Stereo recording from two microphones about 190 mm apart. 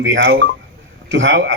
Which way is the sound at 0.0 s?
70° right (ahead or behind).